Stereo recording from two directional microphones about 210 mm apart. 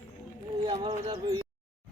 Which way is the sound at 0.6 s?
25° right (ahead or behind).